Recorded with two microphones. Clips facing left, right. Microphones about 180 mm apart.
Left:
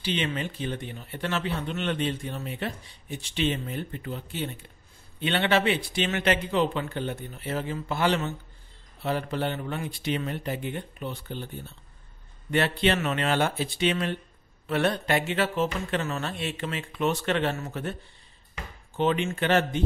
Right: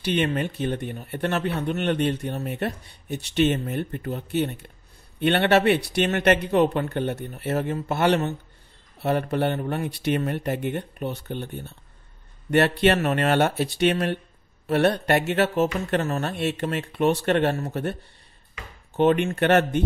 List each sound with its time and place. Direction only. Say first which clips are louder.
0.0 s speech: right 5 dB; 60° right (ahead or behind)
18.9 s speech: right 6 dB; 55° right (ahead or behind)